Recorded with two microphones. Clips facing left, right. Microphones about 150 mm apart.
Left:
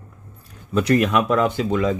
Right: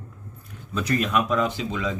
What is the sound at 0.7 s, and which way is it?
Speech, 70° left (ahead or behind).